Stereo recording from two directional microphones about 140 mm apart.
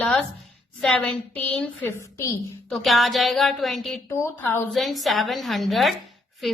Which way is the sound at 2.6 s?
Centre (ahead or behind).